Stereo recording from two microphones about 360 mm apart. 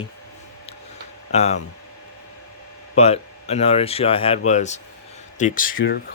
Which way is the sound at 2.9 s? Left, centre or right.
Centre.